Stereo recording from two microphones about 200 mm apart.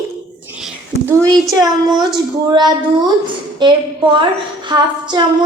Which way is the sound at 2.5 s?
20° right (ahead or behind).